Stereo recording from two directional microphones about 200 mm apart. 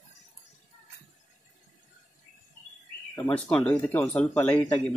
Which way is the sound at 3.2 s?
5° left (ahead or behind).